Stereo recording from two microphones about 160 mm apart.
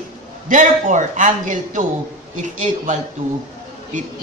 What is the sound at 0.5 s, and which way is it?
A man's voice, 50° right (ahead or behind).